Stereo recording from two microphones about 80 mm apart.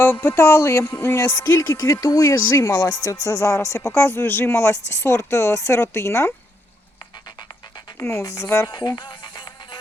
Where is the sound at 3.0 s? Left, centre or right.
Left.